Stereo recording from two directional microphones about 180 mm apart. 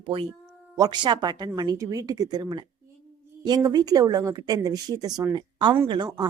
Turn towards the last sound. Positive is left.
turn(degrees=-25)  # may be behind; listen again after turning